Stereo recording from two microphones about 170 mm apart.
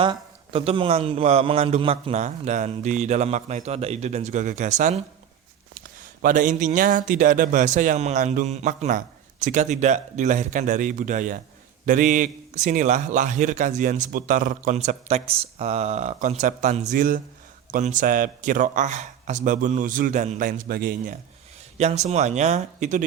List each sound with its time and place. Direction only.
0.0 s a man's voice: 30° right (ahead or behind)
6.2 s a man's voice: 50° right (ahead or behind)
20.7 s speech: 60° right (ahead or behind)
21.8 s a man's voice: 40° right (ahead or behind)